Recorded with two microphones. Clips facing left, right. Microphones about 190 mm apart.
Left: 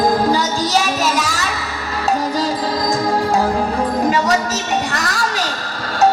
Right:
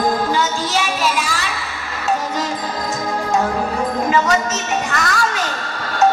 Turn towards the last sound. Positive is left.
turn(degrees=35)  # may be behind; listen again after turning